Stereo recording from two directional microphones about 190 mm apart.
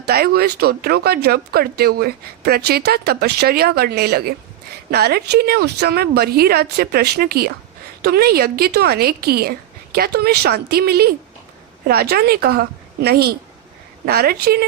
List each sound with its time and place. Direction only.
0.0 s a woman's voice: 55° right (ahead or behind)